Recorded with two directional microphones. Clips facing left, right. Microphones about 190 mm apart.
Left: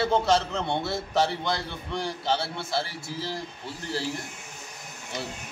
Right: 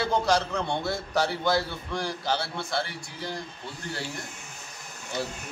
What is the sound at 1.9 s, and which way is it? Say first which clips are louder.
Speech: left 2 dB; 25° left (ahead or behind).